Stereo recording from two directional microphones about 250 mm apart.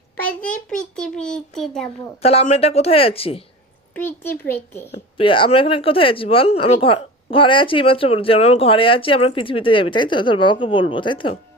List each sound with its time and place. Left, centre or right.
0.7 s a child's voice: centre
2.2 s speech: left
3.9 s a child's voice: centre
5.1 s speech: left